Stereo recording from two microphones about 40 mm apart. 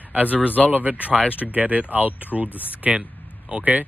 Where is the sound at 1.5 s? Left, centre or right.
Right.